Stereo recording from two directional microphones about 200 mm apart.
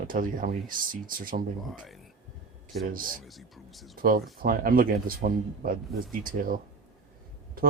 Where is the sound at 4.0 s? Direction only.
45° right (ahead or behind).